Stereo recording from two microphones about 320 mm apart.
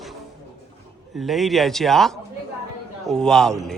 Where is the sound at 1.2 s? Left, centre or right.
Centre.